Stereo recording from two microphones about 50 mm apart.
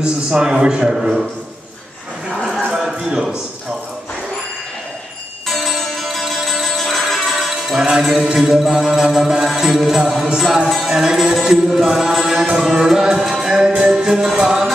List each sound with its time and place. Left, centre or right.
0.0 s music: centre
2.9 s a man's voice: centre
5.5 s music: centre
8.1 s music: centre
8.4 s music: centre